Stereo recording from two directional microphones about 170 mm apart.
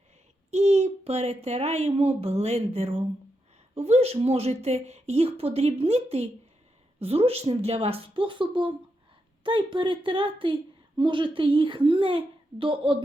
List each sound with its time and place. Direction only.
0.5 s a woman's voice: 40° right (ahead or behind)